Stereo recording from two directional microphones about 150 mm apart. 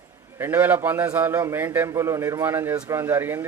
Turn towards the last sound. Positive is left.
turn(degrees=-15)  # may be behind; listen again after turning